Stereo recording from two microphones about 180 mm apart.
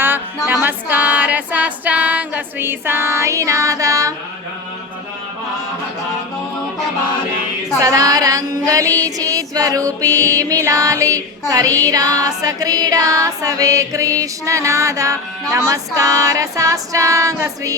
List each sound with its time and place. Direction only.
0.0 s music: 10° right (ahead or behind)
7.8 s female singing: 20° right (ahead or behind)
15.5 s music: 15° right (ahead or behind)